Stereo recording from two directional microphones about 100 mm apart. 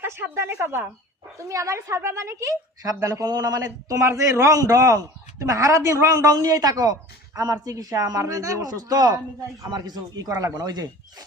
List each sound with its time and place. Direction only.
0.0 s speech: 25° right (ahead or behind)
1.4 s a woman's voice: 30° right (ahead or behind)